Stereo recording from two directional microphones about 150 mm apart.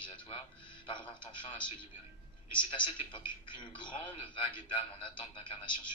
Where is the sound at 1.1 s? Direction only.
30° left (ahead or behind).